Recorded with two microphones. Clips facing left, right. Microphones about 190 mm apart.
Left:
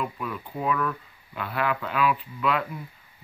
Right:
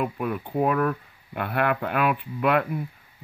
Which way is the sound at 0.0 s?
55° right (ahead or behind).